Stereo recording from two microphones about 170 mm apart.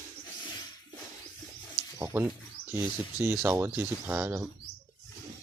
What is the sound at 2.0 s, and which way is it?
Speech, 15° right (ahead or behind).